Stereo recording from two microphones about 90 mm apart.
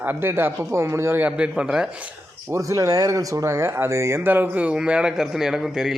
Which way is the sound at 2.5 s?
40° right (ahead or behind).